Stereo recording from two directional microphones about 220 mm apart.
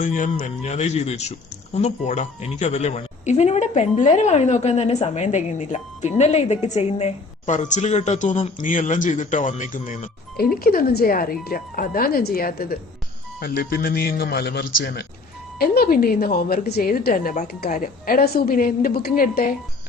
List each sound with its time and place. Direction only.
0.0 s a woman's voice: 35° left (ahead or behind)